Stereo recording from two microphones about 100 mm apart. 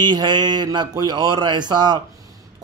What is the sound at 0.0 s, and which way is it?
Speech, 45° right (ahead or behind).